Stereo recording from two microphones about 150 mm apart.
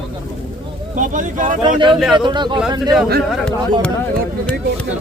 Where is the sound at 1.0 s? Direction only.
60° right (ahead or behind).